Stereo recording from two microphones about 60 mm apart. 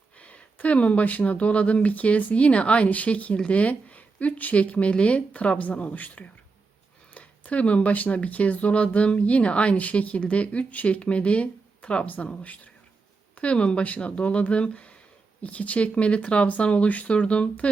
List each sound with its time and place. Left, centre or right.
0.2 s speech: left